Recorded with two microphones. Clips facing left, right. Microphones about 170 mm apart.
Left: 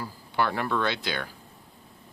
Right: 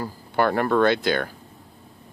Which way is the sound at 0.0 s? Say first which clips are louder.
Right 5 dB; 50° right (ahead or behind).